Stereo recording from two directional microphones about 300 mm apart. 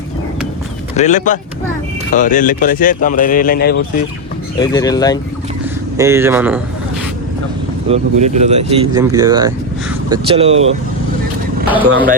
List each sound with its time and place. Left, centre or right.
0.9 s speech: left
4.5 s speech: centre
6.0 s speech: centre
7.9 s speech: right